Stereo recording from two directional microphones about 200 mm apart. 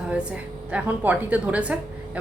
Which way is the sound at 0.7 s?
5° right (ahead or behind).